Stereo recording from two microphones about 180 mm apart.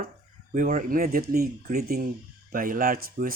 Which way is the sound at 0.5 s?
45° right (ahead or behind).